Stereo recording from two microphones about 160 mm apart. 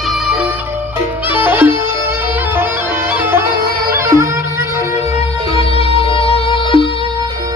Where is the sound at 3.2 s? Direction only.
15° right (ahead or behind).